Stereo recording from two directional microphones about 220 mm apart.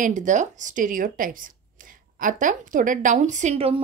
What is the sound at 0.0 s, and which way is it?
A woman's voice, 35° right (ahead or behind).